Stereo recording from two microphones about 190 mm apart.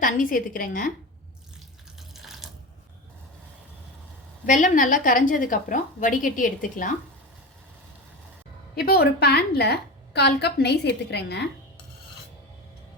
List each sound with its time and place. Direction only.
0.0 s a woman's voice: 45° left (ahead or behind)
2.1 s water: centre (ahead or behind)
4.4 s a woman's voice: 40° left (ahead or behind)
8.7 s a woman's voice: 55° left (ahead or behind)